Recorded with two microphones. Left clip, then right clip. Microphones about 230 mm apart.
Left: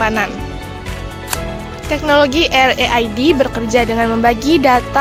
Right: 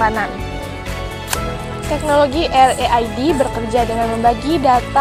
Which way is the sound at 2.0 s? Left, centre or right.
Left.